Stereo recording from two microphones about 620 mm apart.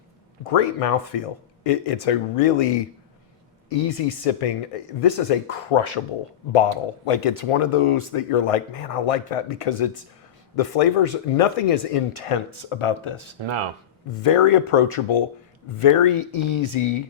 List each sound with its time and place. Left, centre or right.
0.5 s speech: left
13.4 s speech: right
14.4 s speech: left